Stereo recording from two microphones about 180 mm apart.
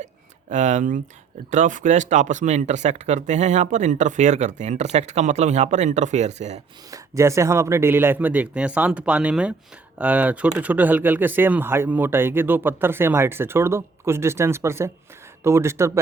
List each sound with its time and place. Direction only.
0.5 s speech: 40° right (ahead or behind)
6.9 s speech: 15° right (ahead or behind)